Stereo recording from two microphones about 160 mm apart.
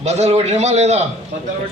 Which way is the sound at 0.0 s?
45° right (ahead or behind).